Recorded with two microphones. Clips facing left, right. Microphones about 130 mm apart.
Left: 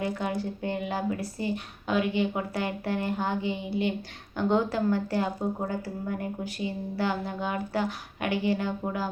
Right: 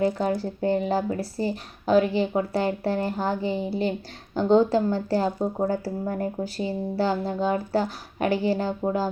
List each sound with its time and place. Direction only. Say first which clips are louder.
0.0 s speech: right 6 dB; 35° right (ahead or behind)